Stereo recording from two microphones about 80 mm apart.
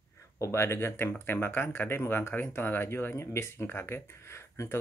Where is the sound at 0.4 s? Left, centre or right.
Left.